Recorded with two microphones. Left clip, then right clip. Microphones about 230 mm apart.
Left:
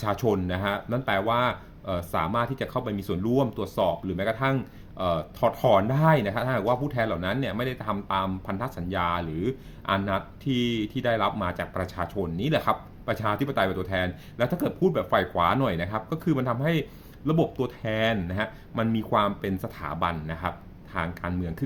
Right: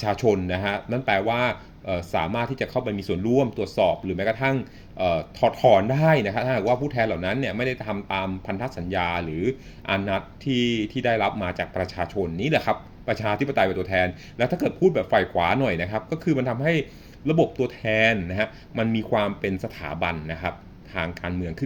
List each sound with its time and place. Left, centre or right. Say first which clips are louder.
0.0 s speech: right 4 dB; left